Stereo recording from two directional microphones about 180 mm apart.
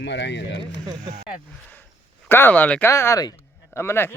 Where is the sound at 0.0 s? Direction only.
75° left (ahead or behind).